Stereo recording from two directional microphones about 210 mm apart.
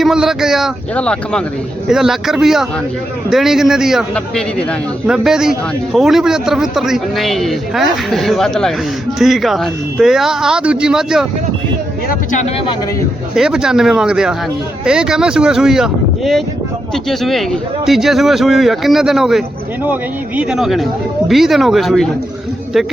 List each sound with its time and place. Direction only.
0.0 s a man's voice: centre (ahead or behind)
12.0 s speech: 40° left (ahead or behind)
13.3 s a man's voice: 5° right (ahead or behind)